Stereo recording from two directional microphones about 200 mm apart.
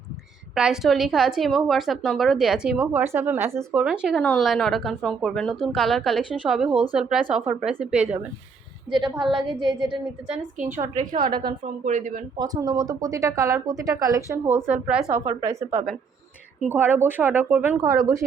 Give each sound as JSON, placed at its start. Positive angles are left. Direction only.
{"t": 0.5, "sound": "speech", "side_deg": -5}
{"t": 8.9, "sound": "a woman's voice", "side_deg": -25}
{"t": 11.6, "sound": "speech", "side_deg": -40}
{"t": 12.4, "sound": "speech", "side_deg": -15}
{"t": 16.6, "sound": "speech", "side_deg": -10}